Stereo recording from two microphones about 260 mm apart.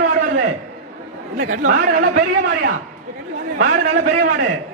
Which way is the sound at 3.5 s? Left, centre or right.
Right.